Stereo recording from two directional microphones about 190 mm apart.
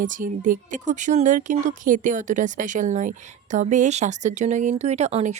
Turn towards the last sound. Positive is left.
turn(degrees=-35)  # may be behind; listen again after turning